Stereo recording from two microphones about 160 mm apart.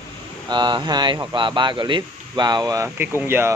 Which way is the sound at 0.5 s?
30° right (ahead or behind).